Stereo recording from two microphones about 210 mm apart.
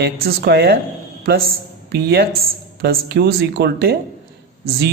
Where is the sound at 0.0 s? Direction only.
50° right (ahead or behind).